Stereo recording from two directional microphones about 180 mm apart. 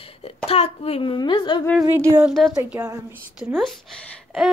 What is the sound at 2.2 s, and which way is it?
Speech, centre (ahead or behind).